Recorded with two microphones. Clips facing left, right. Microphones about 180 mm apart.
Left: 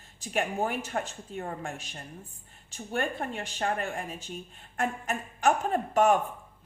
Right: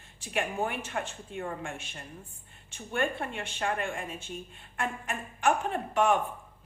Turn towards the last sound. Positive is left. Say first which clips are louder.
# left 3 dB
turn(degrees=40)  # may be behind; listen again after turning